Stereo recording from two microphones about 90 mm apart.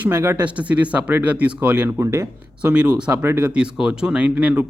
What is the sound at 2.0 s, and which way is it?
Speech, 35° right (ahead or behind).